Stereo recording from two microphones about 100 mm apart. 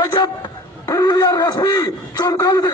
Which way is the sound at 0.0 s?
45° left (ahead or behind).